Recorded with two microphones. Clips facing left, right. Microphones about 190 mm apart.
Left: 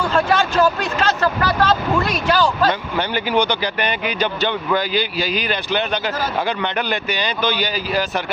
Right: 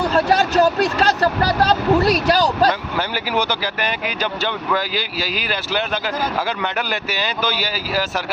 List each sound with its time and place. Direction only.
0.0 s speech: 40° right (ahead or behind)
3.0 s speech: 5° right (ahead or behind)